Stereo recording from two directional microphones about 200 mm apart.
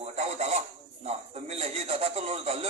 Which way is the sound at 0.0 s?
35° right (ahead or behind).